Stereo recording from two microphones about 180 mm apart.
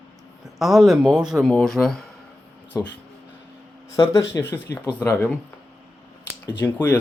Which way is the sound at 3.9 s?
15° left (ahead or behind).